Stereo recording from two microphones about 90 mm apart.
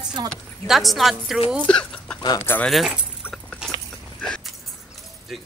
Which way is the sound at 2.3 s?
25° left (ahead or behind).